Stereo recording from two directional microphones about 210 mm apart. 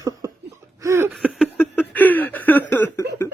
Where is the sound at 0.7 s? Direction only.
15° right (ahead or behind).